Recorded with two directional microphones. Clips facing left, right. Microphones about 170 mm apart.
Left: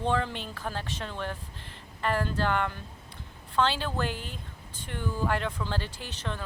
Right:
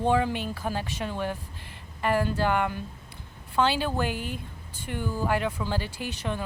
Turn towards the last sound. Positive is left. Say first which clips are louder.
# right 5 dB
turn(degrees=-10)  # may be behind; listen again after turning